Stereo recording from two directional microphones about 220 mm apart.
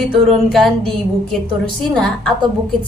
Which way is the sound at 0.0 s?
Centre (ahead or behind).